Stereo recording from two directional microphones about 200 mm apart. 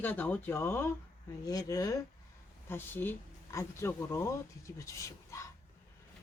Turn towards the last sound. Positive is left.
turn(degrees=15)  # may be behind; listen again after turning